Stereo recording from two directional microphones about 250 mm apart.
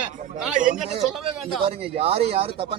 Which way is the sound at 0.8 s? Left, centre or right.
Right.